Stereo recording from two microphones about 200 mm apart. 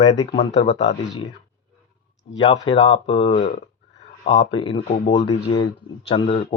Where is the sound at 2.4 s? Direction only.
25° left (ahead or behind).